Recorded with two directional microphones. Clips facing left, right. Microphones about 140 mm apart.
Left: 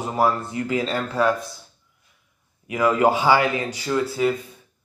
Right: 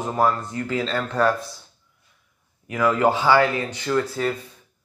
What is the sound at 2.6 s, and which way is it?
Speech, 15° left (ahead or behind).